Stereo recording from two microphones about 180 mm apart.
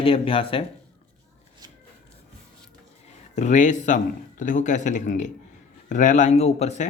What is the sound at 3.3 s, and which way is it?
Speech, 40° left (ahead or behind).